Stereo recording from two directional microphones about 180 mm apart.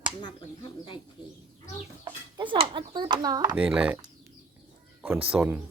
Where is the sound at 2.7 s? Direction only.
25° right (ahead or behind).